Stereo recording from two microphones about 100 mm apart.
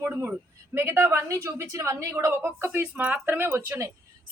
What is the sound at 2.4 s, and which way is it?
A woman's voice, 15° right (ahead or behind).